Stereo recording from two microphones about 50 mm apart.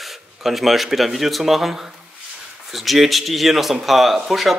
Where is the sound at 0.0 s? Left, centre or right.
Centre.